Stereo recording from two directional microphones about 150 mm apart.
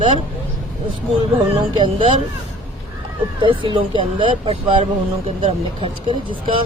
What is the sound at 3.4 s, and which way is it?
Speech, 35° right (ahead or behind).